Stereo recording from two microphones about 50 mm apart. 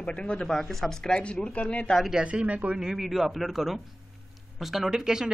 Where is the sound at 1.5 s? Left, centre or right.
Left.